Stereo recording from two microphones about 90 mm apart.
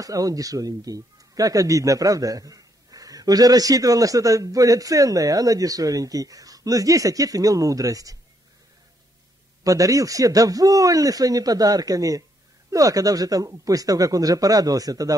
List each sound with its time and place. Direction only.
0.0 s speech: 40° right (ahead or behind)
9.6 s speech: 40° right (ahead or behind)